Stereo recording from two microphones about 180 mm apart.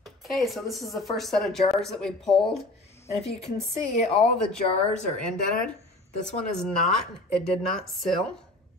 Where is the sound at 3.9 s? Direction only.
35° left (ahead or behind).